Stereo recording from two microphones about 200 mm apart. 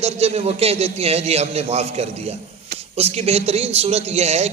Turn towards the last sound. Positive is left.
turn(degrees=-30)  # may be behind; listen again after turning